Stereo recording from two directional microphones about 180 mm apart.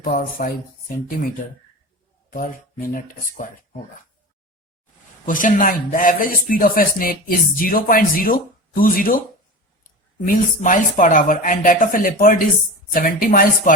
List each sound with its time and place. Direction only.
0.0 s speech: 50° left (ahead or behind)
2.3 s speech: 50° left (ahead or behind)
5.2 s speech: 45° left (ahead or behind)